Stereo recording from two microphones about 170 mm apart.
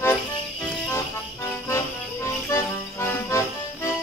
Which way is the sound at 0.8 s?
15° left (ahead or behind).